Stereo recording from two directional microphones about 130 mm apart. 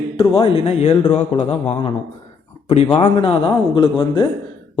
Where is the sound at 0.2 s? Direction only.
50° left (ahead or behind).